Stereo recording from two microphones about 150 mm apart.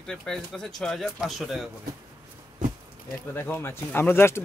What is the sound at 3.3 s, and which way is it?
Speech, 15° left (ahead or behind).